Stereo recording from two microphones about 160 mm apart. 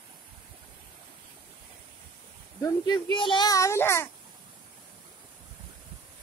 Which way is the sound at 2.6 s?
25° left (ahead or behind).